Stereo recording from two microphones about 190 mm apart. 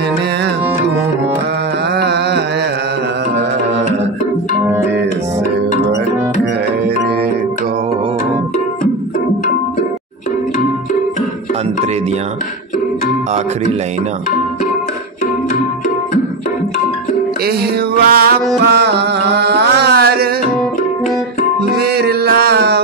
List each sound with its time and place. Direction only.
2.0 s a sound: 60° right (ahead or behind)
17.5 s music: 55° right (ahead or behind)
21.7 s music: 55° right (ahead or behind)